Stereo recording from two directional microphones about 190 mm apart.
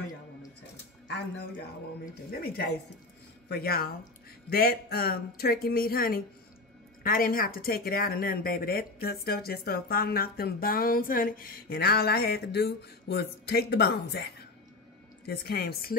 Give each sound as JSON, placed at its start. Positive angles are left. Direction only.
{"t": 2.4, "sound": "a woman's voice", "side_deg": 55}